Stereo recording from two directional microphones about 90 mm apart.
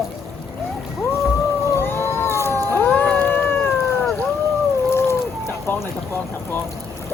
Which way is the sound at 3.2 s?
20° left (ahead or behind).